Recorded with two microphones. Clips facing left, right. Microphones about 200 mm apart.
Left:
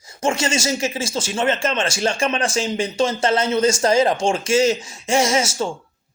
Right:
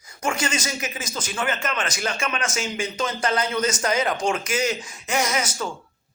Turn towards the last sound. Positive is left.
turn(degrees=25)  # may be behind; listen again after turning